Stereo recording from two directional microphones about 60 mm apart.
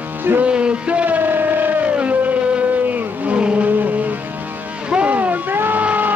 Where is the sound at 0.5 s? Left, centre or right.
Centre.